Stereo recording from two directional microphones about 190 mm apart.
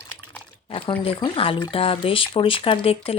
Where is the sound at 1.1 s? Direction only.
25° left (ahead or behind).